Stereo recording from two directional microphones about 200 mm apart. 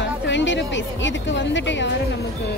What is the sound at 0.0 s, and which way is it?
Speech, 65° left (ahead or behind).